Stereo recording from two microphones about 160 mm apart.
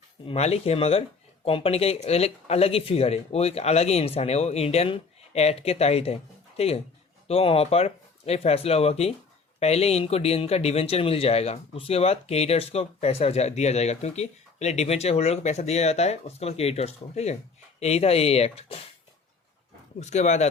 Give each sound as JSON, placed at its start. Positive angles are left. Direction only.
{"t": 0.3, "sound": "speech", "side_deg": 40}
{"t": 20.0, "sound": "speech", "side_deg": 45}